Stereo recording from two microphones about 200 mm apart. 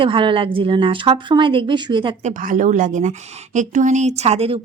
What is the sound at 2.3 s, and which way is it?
A woman's voice, 40° right (ahead or behind).